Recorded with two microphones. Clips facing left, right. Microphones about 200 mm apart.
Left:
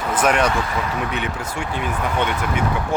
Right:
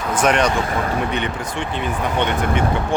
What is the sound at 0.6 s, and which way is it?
Speech, 50° right (ahead or behind).